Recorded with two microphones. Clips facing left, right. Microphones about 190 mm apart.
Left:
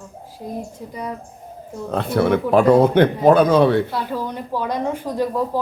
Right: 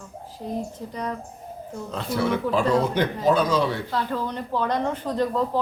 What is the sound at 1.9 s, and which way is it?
Speech, 60° left (ahead or behind).